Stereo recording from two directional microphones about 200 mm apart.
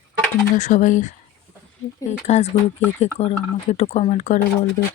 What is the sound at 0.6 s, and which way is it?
Speech, 40° left (ahead or behind).